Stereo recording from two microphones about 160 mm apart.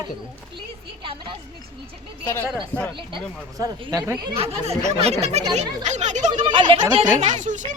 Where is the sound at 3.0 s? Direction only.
30° right (ahead or behind).